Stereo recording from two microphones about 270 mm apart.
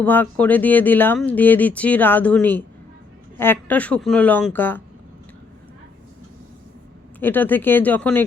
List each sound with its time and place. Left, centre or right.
0.0 s speech: centre
7.2 s speech: centre